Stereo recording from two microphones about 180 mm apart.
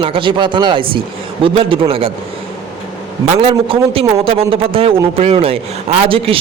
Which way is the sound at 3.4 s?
30° right (ahead or behind).